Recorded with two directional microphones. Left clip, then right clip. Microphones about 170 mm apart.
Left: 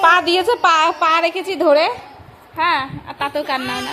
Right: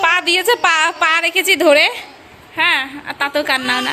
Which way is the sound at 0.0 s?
20° left (ahead or behind).